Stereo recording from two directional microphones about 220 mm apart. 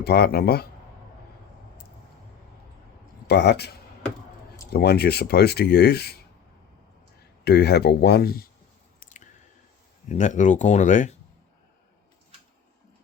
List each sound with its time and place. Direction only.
0.0 s speech: 45° left (ahead or behind)
3.2 s speech: 50° left (ahead or behind)
4.7 s speech: 45° left (ahead or behind)
7.4 s speech: 45° left (ahead or behind)
9.0 s chewing: 35° left (ahead or behind)
10.1 s speech: 35° left (ahead or behind)